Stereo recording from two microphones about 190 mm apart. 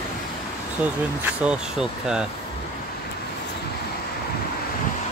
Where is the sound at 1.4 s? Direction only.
5° right (ahead or behind).